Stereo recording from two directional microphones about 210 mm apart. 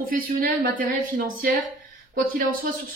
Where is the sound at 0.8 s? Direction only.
45° right (ahead or behind).